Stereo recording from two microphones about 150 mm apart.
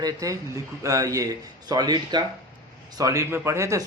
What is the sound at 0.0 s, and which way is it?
A man's voice, 25° right (ahead or behind).